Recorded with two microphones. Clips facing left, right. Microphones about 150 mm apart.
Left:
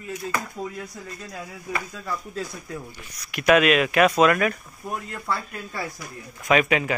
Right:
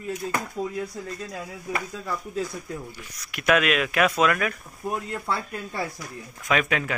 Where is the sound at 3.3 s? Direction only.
Centre (ahead or behind).